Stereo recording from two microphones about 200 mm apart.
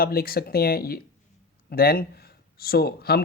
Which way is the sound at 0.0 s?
50° left (ahead or behind).